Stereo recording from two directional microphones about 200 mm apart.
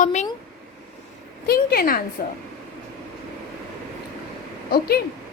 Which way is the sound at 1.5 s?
50° left (ahead or behind).